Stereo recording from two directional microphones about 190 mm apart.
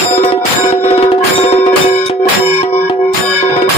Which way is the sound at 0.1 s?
30° left (ahead or behind).